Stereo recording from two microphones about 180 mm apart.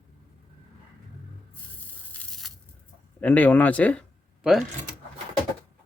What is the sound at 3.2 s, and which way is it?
Speech, 10° left (ahead or behind).